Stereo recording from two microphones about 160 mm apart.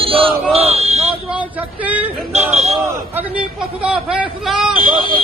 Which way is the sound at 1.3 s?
10° right (ahead or behind).